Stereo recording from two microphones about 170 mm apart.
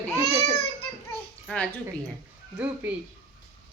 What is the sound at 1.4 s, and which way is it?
Speech, 5° left (ahead or behind).